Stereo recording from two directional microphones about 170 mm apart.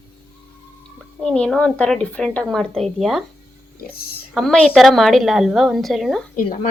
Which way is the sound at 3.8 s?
65° left (ahead or behind).